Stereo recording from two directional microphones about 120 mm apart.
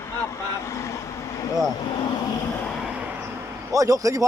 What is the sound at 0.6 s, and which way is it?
Speech, 25° left (ahead or behind).